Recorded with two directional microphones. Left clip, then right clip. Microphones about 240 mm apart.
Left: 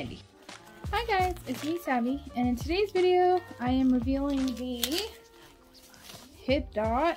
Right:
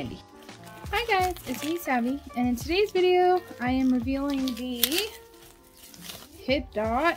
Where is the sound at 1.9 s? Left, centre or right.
Centre.